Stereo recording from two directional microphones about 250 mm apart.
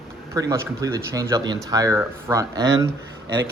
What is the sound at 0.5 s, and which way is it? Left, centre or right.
Speech, centre.